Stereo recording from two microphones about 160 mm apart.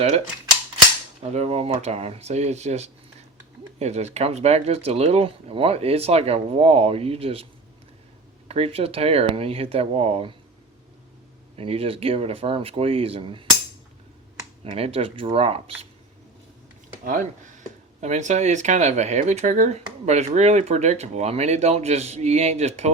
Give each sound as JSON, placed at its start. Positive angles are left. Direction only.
{"t": 1.3, "sound": "speech", "side_deg": -40}
{"t": 8.4, "sound": "speech", "side_deg": -35}
{"t": 11.5, "sound": "speech", "side_deg": -35}
{"t": 14.6, "sound": "speech", "side_deg": -40}
{"t": 17.1, "sound": "speech", "side_deg": -55}